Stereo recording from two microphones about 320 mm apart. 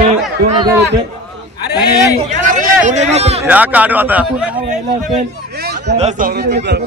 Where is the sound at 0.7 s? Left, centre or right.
Right.